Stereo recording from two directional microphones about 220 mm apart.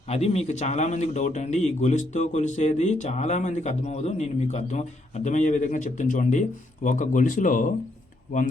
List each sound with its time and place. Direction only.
0.1 s speech: 30° left (ahead or behind)